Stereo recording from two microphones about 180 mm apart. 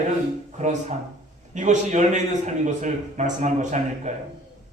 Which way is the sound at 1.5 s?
40° right (ahead or behind).